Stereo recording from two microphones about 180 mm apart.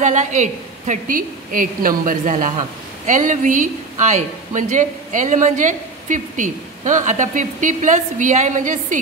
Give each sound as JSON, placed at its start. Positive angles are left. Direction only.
{"t": 0.0, "sound": "a woman's voice", "side_deg": -40}